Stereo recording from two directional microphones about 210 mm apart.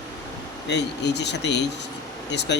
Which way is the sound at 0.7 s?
55° left (ahead or behind).